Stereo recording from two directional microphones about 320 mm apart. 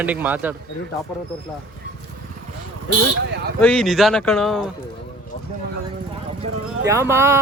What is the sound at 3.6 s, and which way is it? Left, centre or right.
Speech, centre.